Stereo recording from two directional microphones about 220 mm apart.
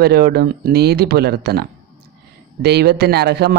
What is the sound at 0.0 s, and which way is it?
Speech, 45° right (ahead or behind).